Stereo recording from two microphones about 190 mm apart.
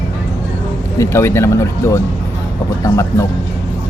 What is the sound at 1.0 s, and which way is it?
Speech, 15° left (ahead or behind).